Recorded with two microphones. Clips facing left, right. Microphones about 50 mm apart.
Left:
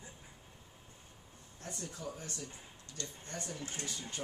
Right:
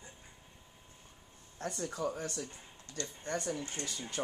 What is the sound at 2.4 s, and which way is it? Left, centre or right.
Speech, centre.